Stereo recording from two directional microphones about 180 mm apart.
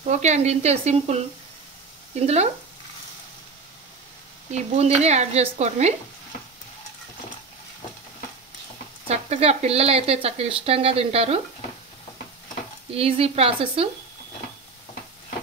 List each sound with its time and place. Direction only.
0.1 s speech: 40° right (ahead or behind)
4.5 s speech: 35° right (ahead or behind)
9.0 s speech: 35° right (ahead or behind)
12.9 s speech: 35° right (ahead or behind)